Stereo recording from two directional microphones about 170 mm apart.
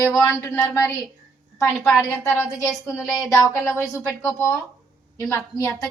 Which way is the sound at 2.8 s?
15° left (ahead or behind).